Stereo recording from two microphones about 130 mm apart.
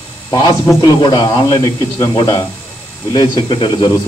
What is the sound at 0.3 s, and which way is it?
A man's voice, 30° left (ahead or behind).